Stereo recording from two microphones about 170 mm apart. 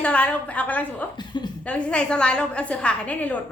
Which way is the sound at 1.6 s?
5° left (ahead or behind).